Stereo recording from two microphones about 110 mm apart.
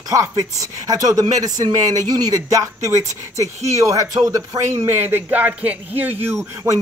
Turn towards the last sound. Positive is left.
turn(degrees=-20)  # may be behind; listen again after turning